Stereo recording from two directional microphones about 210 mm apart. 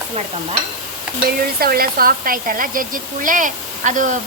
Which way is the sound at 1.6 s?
45° right (ahead or behind).